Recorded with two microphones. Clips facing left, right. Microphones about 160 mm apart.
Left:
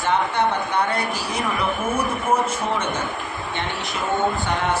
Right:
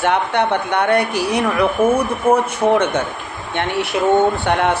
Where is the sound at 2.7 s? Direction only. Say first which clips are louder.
Right 8 dB; 65° right (ahead or behind).